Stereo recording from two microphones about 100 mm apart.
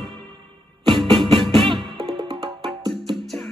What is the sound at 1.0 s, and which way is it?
Music, 55° right (ahead or behind).